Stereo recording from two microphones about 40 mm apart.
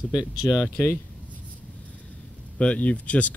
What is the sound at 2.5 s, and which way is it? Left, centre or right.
Speech, left.